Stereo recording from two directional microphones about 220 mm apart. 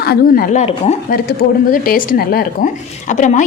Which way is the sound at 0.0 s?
45° left (ahead or behind).